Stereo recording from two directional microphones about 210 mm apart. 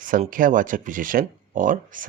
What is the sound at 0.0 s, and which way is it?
Speech, 40° right (ahead or behind).